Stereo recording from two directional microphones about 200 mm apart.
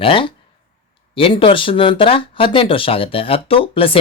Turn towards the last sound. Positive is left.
turn(degrees=25)  # may be behind; listen again after turning